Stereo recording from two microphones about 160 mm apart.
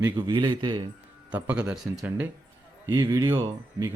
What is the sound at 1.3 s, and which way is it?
A man's voice, 10° right (ahead or behind).